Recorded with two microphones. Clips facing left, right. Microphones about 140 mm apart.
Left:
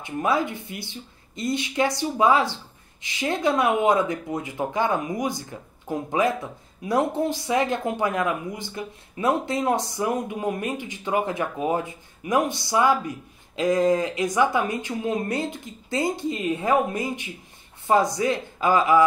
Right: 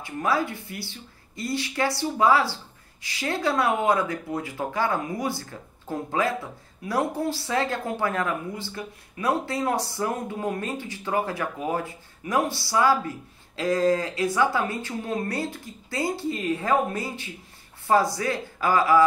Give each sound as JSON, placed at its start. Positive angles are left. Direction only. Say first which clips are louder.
{"t": 0.0, "sound": "speech", "louder": "left 2 dB", "side_deg": 20}